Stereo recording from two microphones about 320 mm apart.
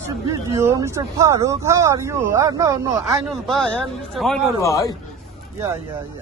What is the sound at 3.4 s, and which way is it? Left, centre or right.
Speech, centre.